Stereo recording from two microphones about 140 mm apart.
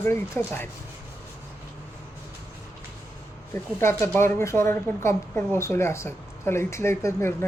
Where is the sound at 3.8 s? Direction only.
20° left (ahead or behind).